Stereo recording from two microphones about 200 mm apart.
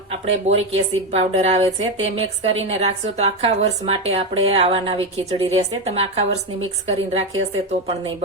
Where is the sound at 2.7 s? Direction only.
35° right (ahead or behind).